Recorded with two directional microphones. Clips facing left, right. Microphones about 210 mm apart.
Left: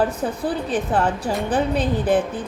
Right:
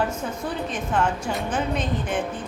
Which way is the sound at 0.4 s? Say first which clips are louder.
Left 6 dB; 35° left (ahead or behind).